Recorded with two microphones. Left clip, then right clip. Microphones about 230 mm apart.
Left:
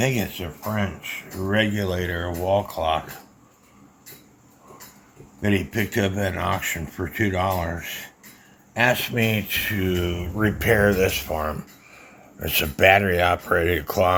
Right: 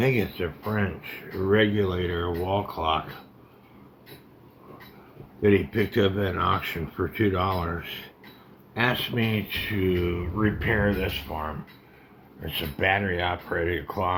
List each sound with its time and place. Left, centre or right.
0.0 s speech: left
5.4 s speech: left